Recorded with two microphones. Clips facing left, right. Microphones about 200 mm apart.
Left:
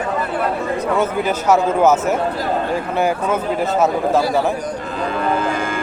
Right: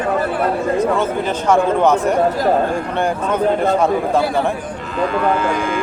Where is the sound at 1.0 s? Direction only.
5° left (ahead or behind).